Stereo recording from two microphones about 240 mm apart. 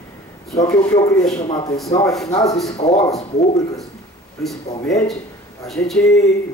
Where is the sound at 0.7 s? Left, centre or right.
Centre.